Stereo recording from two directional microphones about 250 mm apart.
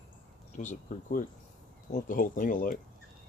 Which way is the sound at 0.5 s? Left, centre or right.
Left.